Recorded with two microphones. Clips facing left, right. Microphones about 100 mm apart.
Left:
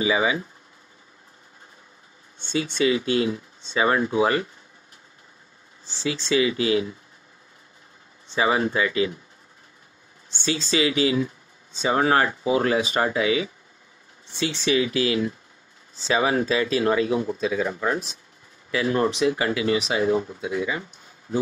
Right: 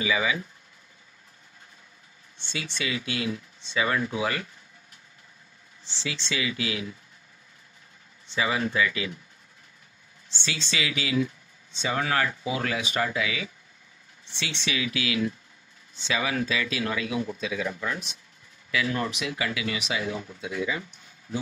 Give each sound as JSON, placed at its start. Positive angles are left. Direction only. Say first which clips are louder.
{"t": 0.0, "sound": "speech", "louder": "left 4 dB", "side_deg": 30}
{"t": 2.4, "sound": "speech", "louder": "left 11 dB", "side_deg": 35}
{"t": 5.9, "sound": "speech", "louder": "left 8 dB", "side_deg": 40}
{"t": 8.3, "sound": "speech", "louder": "left 5 dB", "side_deg": 35}
{"t": 10.3, "sound": "speech", "louder": "left 8 dB", "side_deg": 40}